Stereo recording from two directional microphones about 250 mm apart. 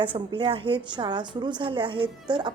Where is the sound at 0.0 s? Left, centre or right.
Centre.